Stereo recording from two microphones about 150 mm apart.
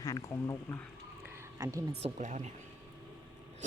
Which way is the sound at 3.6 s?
55° right (ahead or behind).